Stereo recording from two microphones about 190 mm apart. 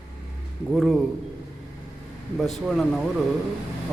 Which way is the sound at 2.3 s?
Centre (ahead or behind).